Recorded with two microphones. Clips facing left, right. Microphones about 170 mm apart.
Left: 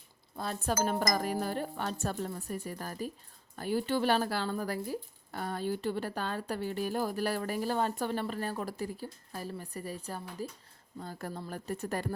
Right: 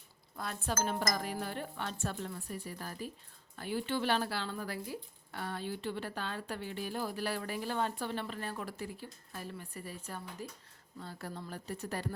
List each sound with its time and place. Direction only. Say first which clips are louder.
0.3 s speech: left 4 dB; 30° left (ahead or behind)
1.1 s speech: left 5 dB; 45° left (ahead or behind)